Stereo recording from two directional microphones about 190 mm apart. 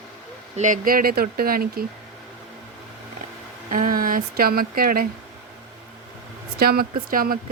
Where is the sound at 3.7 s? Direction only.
45° right (ahead or behind).